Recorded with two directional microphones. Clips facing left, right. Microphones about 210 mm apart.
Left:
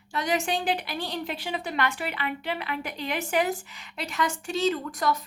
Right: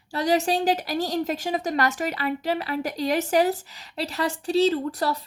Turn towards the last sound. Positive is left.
turn(degrees=-35)  # may be behind; listen again after turning